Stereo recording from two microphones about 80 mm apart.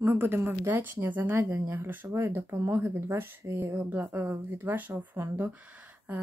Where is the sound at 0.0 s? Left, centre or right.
Right.